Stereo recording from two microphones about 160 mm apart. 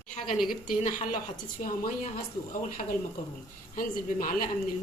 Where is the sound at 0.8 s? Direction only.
55° left (ahead or behind).